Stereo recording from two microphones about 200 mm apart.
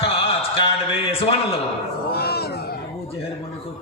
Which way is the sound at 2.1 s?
50° left (ahead or behind).